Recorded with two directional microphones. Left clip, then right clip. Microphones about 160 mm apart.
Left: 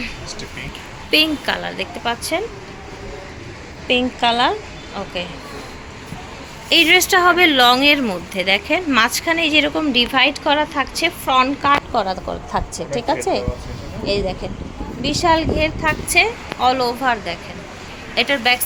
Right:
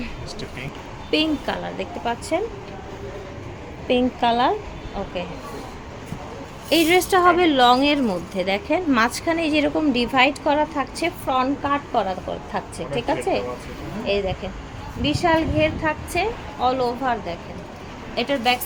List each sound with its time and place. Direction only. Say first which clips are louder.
1.1 s speech: left 5 dB; centre (ahead or behind)
3.8 s speech: left 3 dB; 15° right (ahead or behind)
6.7 s a woman's voice: left 5 dB; 10° right (ahead or behind)